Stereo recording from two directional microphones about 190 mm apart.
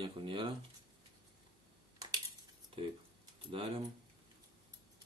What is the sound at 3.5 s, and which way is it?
Speech, 25° right (ahead or behind).